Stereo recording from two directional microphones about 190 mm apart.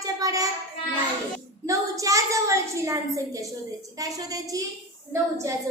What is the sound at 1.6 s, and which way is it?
Child singing, 15° right (ahead or behind).